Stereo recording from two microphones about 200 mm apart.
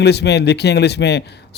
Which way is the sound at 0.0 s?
55° left (ahead or behind).